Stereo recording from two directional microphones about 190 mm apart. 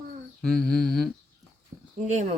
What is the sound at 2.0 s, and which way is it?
Speech, 40° right (ahead or behind).